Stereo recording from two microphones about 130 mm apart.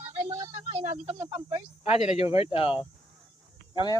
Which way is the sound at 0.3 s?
30° right (ahead or behind).